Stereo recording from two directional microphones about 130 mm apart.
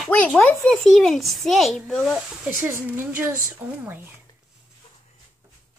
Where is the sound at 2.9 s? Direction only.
15° right (ahead or behind).